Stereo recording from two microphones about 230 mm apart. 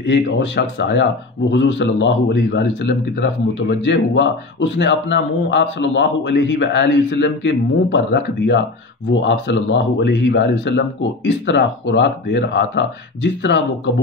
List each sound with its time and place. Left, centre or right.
0.0 s speech: left